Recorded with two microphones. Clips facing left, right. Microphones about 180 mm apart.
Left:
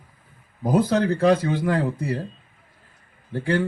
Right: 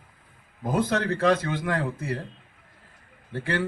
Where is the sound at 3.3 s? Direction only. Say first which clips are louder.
Left 5 dB; 30° left (ahead or behind).